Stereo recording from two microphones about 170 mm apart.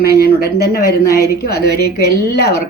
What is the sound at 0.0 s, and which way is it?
A woman's voice, 70° left (ahead or behind).